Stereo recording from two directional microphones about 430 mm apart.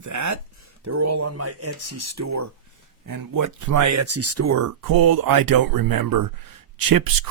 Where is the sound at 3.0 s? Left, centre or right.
Right.